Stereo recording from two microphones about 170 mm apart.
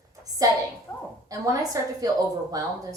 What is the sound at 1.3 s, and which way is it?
A woman's voice, 20° right (ahead or behind).